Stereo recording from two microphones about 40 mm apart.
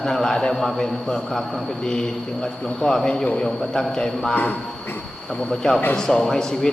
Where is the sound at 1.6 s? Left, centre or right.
Centre.